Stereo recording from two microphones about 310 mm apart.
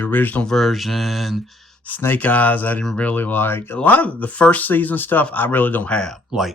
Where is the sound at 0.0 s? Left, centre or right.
Centre.